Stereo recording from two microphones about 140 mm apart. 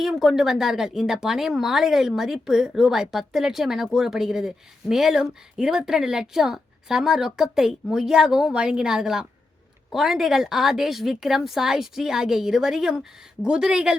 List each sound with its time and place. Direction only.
0.0 s a woman's voice: centre (ahead or behind)